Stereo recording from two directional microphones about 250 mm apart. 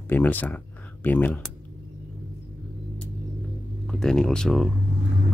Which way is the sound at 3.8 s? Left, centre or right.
Centre.